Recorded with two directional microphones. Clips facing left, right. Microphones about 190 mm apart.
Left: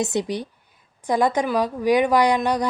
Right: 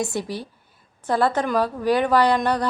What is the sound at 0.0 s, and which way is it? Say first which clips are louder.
A woman's voice: left 3 dB; 20° left (ahead or behind).